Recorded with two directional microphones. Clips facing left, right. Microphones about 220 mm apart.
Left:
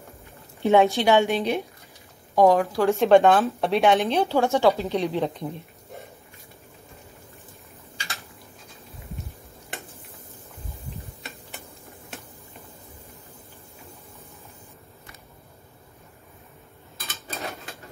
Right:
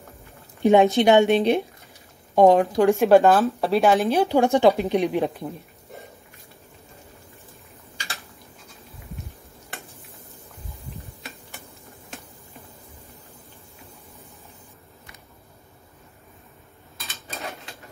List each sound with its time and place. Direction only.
0.6 s a woman's voice: 15° right (ahead or behind)
2.8 s a woman's voice: 10° right (ahead or behind)
3.1 s speech: centre (ahead or behind)
4.2 s a woman's voice: 15° right (ahead or behind)